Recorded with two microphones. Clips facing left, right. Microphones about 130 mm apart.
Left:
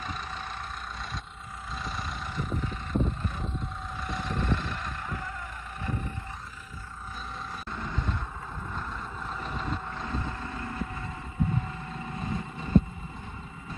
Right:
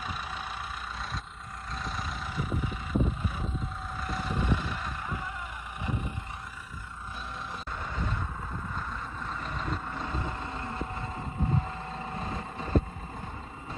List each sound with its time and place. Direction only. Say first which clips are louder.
1.7 s vehicle: even; centre (ahead or behind)
7.7 s vehicle: left 1 dB; 5° right (ahead or behind)
10.0 s vehicle: left 2 dB; 15° right (ahead or behind)
10.6 s vehicle: even; 25° right (ahead or behind)
12.2 s vehicle: left 1 dB; 35° right (ahead or behind)